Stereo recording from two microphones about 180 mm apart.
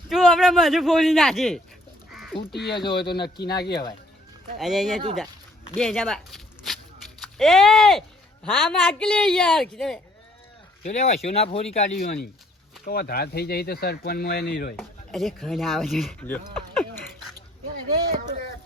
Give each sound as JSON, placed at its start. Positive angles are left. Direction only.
{"t": 0.1, "sound": "a man's voice", "side_deg": 0}
{"t": 2.3, "sound": "speech", "side_deg": 65}
{"t": 4.5, "sound": "a man's voice", "side_deg": 0}
{"t": 10.8, "sound": "speech", "side_deg": 40}
{"t": 11.9, "sound": "speech", "side_deg": 55}
{"t": 14.8, "sound": "a man's voice", "side_deg": 0}
{"t": 16.6, "sound": "livestock", "side_deg": 0}